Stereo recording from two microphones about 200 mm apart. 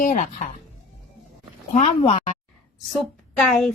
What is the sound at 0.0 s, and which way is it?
Speech, 40° left (ahead or behind).